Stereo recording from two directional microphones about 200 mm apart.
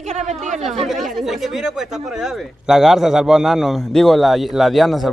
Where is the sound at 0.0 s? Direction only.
35° right (ahead or behind).